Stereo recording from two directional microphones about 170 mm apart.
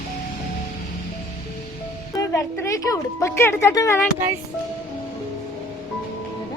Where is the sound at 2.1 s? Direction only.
20° left (ahead or behind).